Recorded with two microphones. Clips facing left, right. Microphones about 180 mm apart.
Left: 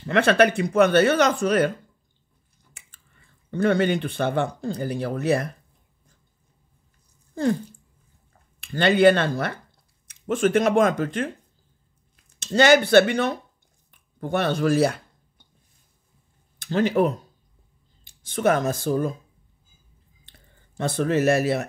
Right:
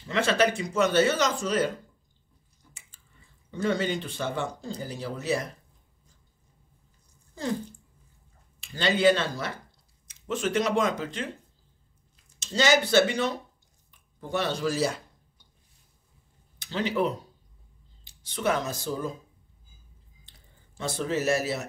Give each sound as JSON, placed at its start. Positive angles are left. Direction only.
{"t": 0.0, "sound": "speech", "side_deg": 60}
{"t": 2.7, "sound": "speech", "side_deg": 60}
{"t": 8.5, "sound": "speech", "side_deg": 60}
{"t": 12.4, "sound": "speech", "side_deg": 60}
{"t": 16.5, "sound": "speech", "side_deg": 50}
{"t": 20.2, "sound": "a sound", "side_deg": 60}